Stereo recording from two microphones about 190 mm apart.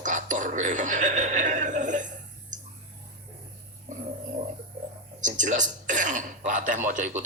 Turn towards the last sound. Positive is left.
turn(degrees=-45)  # may be behind; listen again after turning